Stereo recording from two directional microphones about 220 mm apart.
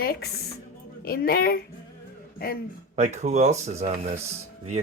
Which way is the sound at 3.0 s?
30° right (ahead or behind).